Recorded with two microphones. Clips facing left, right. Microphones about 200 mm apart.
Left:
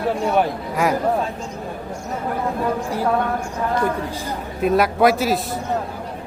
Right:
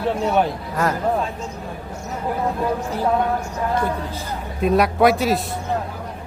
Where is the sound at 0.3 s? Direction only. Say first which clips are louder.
Left 1 dB; 10° left (ahead or behind).